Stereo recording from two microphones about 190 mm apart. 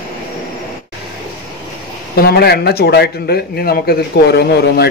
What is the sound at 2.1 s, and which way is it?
A man's voice, 55° left (ahead or behind).